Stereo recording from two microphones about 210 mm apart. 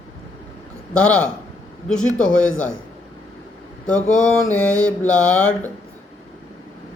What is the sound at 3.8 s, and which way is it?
Mantra, 5° left (ahead or behind).